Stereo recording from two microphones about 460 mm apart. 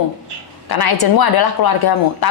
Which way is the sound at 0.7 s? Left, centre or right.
Left.